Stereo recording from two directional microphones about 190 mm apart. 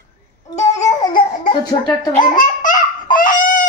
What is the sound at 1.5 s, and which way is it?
Speech, 20° left (ahead or behind).